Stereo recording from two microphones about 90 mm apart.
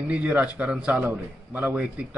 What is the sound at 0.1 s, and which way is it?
A man's voice, 15° right (ahead or behind).